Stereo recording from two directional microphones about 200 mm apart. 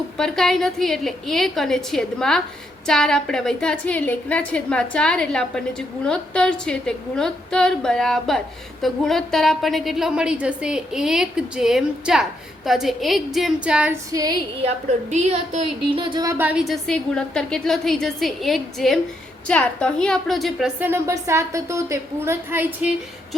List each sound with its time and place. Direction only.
0.2 s a woman's voice: centre (ahead or behind)
14.1 s a woman's voice: 15° right (ahead or behind)
14.6 s a woman's voice: 35° right (ahead or behind); by 23.0 s 10° right (ahead or behind)